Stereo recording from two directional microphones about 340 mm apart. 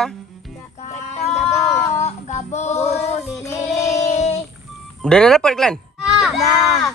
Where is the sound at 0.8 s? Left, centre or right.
Centre.